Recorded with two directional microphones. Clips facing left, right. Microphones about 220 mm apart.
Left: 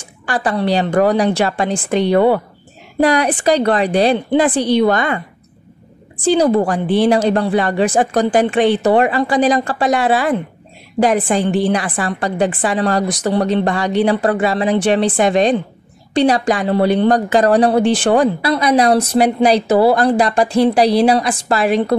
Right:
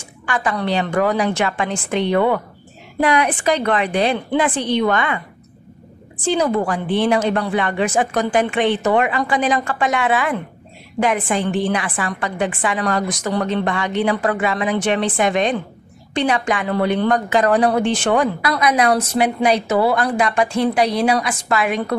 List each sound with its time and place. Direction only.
0.3 s a woman's voice: 35° left (ahead or behind)
6.2 s a woman's voice: 35° left (ahead or behind)